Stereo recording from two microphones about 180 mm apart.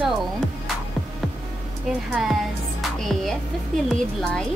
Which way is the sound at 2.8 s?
Centre (ahead or behind).